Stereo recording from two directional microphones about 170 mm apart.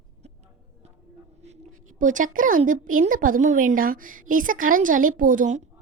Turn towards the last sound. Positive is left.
turn(degrees=-50)  # may be behind; listen again after turning